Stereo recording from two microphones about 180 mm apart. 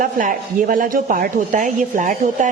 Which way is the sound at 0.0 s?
50° right (ahead or behind).